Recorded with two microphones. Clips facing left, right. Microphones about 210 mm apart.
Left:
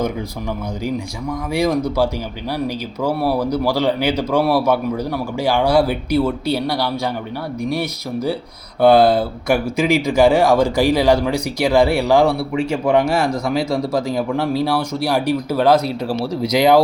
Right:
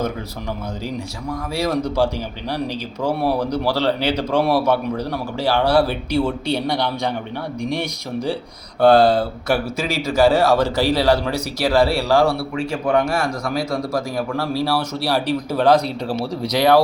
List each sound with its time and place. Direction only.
2.6 s speech: 10° left (ahead or behind)